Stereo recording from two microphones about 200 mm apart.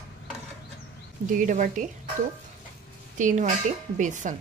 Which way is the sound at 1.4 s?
40° right (ahead or behind).